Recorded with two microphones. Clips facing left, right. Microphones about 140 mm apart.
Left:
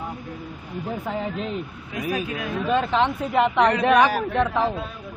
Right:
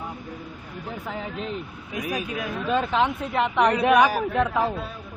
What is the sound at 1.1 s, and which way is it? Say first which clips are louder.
A man's voice: left 2 dB; centre (ahead or behind).